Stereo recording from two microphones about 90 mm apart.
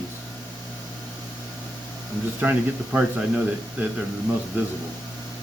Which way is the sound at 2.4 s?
15° right (ahead or behind).